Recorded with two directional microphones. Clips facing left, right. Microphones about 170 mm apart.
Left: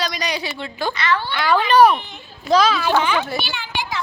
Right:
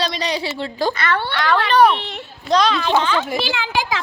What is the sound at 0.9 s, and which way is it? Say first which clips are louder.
Speech: even; 55° right (ahead or behind).